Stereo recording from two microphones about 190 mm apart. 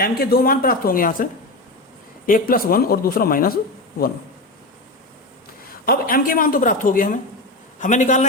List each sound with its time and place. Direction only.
0.0 s a woman's voice: 55° left (ahead or behind)
5.8 s a woman's voice: 50° left (ahead or behind)